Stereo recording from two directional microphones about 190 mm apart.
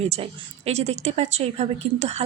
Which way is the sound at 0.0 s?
35° right (ahead or behind).